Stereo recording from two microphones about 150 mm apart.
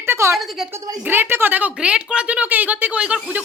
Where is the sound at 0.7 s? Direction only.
15° right (ahead or behind).